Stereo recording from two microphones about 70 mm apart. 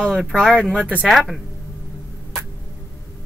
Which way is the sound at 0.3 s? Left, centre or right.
Centre.